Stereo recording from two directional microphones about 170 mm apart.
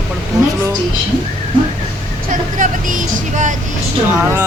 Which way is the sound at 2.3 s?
50° right (ahead or behind).